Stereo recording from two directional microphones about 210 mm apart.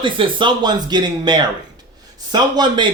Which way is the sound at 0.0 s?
25° right (ahead or behind).